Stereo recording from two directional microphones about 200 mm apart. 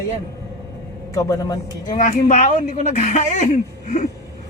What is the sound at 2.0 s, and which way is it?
Speech, 40° left (ahead or behind).